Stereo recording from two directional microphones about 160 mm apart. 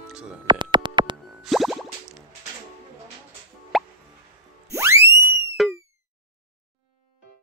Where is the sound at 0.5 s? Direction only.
30° right (ahead or behind).